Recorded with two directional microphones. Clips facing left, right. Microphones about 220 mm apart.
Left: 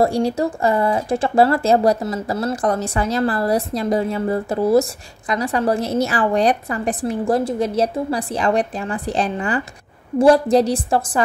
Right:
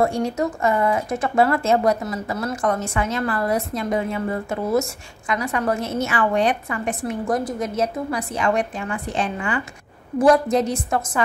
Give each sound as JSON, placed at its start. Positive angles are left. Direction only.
{"t": 0.0, "sound": "speech", "side_deg": 35}